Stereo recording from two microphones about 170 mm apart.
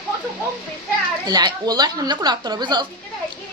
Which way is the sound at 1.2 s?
25° right (ahead or behind).